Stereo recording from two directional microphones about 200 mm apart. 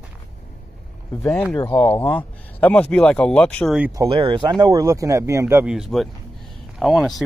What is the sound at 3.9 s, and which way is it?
Speech, 20° right (ahead or behind).